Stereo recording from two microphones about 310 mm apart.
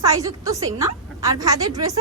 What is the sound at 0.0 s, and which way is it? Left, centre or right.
Speech, centre.